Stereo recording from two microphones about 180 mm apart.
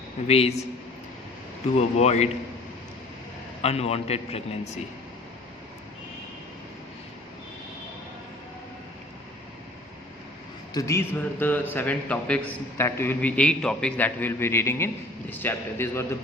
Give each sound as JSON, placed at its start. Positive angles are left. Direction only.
{"t": 0.3, "sound": "a man's voice", "side_deg": 35}
{"t": 2.0, "sound": "a man's voice", "side_deg": 35}
{"t": 3.6, "sound": "a man's voice", "side_deg": 35}
{"t": 10.8, "sound": "a man's voice", "side_deg": 15}